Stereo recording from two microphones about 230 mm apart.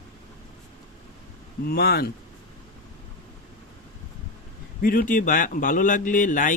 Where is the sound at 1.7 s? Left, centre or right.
Left.